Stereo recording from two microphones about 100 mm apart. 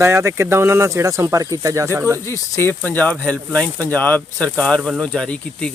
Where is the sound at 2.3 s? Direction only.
25° left (ahead or behind).